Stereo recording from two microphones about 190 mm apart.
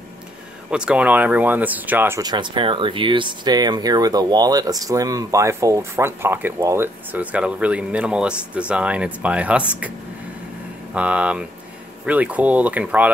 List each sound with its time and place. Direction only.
0.7 s speech: 5° right (ahead or behind)
10.9 s speech: 5° right (ahead or behind)